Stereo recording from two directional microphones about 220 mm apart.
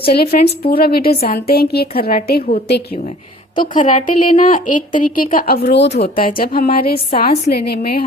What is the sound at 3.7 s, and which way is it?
A woman's voice, 35° left (ahead or behind).